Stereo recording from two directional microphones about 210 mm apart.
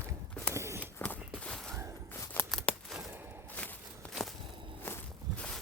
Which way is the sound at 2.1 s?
10° left (ahead or behind).